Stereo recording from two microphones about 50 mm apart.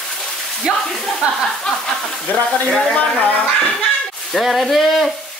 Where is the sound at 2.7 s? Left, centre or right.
Centre.